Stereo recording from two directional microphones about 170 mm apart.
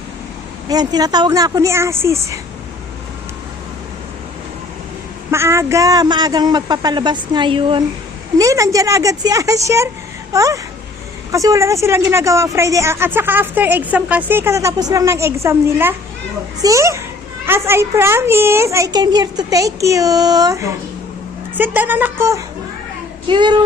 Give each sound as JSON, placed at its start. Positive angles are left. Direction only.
{"t": 0.7, "sound": "a woman's voice", "side_deg": -25}
{"t": 5.3, "sound": "a woman's voice", "side_deg": -15}
{"t": 8.4, "sound": "a woman's voice", "side_deg": -20}
{"t": 23.3, "sound": "a woman's voice", "side_deg": -25}